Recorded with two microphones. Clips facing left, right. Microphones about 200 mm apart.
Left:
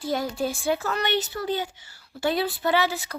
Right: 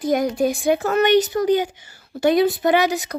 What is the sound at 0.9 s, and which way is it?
Speech, 50° right (ahead or behind).